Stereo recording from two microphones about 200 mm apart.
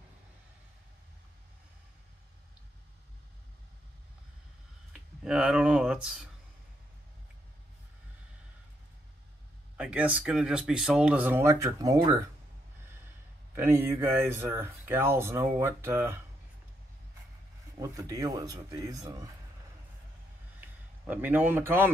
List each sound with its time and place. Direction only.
5.2 s speech: 5° right (ahead or behind)
9.8 s speech: 5° right (ahead or behind)
13.6 s speech: 10° right (ahead or behind)
17.7 s speech: 15° right (ahead or behind)
20.6 s speech: 10° right (ahead or behind)